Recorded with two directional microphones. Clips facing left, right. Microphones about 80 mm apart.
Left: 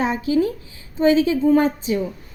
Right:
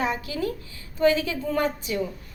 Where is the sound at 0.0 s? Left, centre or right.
Left.